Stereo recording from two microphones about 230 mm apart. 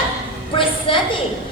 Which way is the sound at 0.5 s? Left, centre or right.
Left.